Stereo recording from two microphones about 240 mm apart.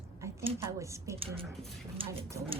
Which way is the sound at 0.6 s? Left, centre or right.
Centre.